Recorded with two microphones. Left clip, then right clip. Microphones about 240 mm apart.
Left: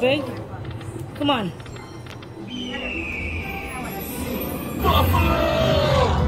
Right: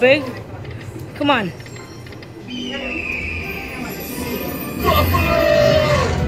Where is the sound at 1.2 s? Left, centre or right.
Centre.